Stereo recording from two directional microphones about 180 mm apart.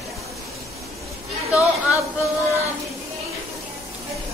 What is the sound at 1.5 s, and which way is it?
A woman's voice, 15° left (ahead or behind).